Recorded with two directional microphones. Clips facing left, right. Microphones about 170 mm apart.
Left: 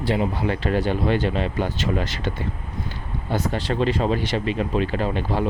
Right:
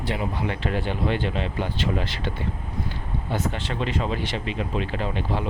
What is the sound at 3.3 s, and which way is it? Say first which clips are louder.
Speech: left 5 dB; 35° left (ahead or behind).